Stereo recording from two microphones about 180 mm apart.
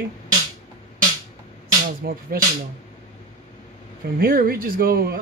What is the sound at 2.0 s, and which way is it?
Speech, 60° right (ahead or behind).